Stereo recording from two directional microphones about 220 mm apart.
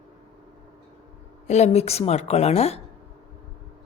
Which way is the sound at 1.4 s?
30° left (ahead or behind).